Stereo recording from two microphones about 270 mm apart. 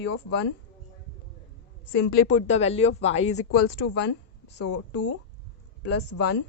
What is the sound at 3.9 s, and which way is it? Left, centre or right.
Speech, left.